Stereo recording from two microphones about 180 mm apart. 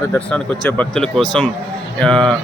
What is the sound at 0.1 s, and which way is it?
Speech, 5° left (ahead or behind).